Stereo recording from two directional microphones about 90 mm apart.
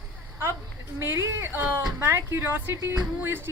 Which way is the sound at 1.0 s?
30° right (ahead or behind).